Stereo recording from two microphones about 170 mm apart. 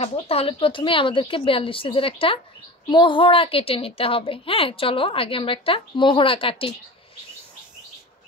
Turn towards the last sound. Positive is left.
turn(degrees=30)  # may be behind; listen again after turning